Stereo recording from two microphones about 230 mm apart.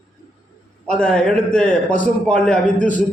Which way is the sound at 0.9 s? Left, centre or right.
Centre.